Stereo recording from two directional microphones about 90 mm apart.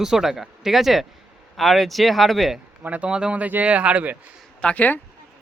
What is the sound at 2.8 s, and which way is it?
Speech, 15° right (ahead or behind).